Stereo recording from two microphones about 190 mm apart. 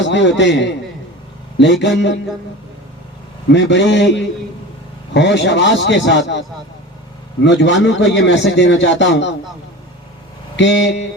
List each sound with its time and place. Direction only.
0.0 s a man's voice: 70° left (ahead or behind)
3.5 s a man's voice: 70° left (ahead or behind)
7.4 s a man's voice: 70° left (ahead or behind)
10.6 s speech: 65° left (ahead or behind)